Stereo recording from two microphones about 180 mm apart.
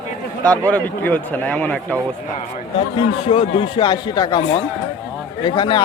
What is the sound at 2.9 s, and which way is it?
Speech, 30° left (ahead or behind).